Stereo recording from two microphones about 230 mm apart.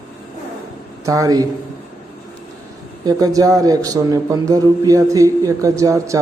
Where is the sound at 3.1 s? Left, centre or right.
Centre.